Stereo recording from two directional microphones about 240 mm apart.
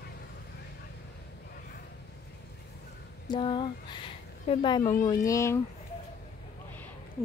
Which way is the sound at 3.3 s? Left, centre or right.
Centre.